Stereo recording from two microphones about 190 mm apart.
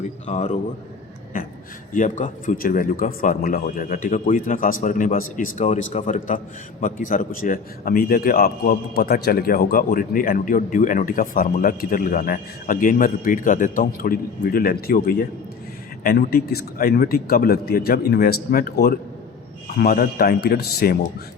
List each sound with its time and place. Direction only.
0.3 s a man's voice: 40° left (ahead or behind)
1.9 s a man's voice: 40° left (ahead or behind)